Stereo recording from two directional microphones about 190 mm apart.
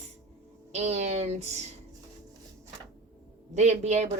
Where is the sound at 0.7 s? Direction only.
35° right (ahead or behind).